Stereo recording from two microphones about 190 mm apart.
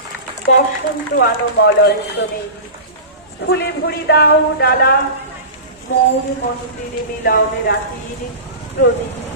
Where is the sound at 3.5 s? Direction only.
60° left (ahead or behind).